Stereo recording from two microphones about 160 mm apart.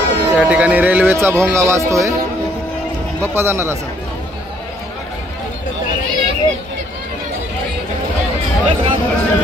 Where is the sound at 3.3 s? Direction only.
15° right (ahead or behind).